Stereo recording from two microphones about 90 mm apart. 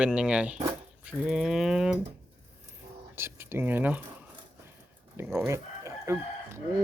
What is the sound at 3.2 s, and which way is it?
Speech, 25° right (ahead or behind).